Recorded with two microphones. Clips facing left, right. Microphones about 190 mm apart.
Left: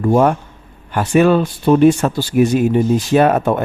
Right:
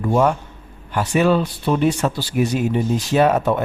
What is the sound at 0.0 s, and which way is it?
Speech, 55° left (ahead or behind).